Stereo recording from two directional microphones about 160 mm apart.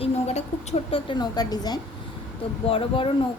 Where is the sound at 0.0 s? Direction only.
40° left (ahead or behind); by 1.8 s 25° left (ahead or behind).